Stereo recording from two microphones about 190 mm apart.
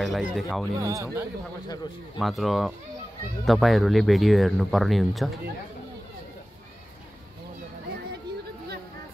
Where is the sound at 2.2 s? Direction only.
Centre (ahead or behind).